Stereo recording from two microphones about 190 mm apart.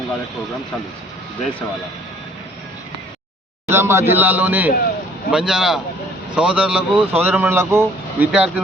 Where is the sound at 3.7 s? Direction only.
15° right (ahead or behind).